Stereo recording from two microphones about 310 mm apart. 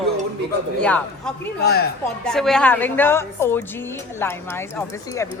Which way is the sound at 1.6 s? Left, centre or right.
Left.